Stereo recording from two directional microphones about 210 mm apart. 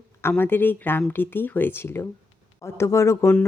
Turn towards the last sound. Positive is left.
turn(degrees=10)  # may be behind; listen again after turning